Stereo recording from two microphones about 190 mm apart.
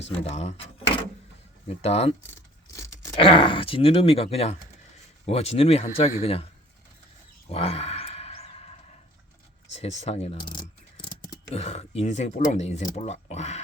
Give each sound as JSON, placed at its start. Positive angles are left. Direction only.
{"t": 0.0, "sound": "speech", "side_deg": 35}
{"t": 1.8, "sound": "speech", "side_deg": 35}
{"t": 2.7, "sound": "a sound", "side_deg": 15}
{"t": 3.2, "sound": "speech", "side_deg": 25}
{"t": 7.5, "sound": "a sound", "side_deg": 30}
{"t": 9.7, "sound": "speech", "side_deg": 35}
{"t": 11.5, "sound": "speech", "side_deg": 35}